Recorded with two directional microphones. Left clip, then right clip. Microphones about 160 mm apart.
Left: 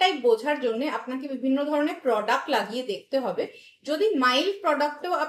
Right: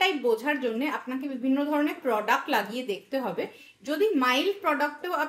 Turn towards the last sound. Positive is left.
turn(degrees=-40)  # may be behind; listen again after turning